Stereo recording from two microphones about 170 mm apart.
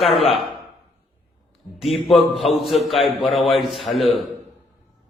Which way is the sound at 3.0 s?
35° left (ahead or behind).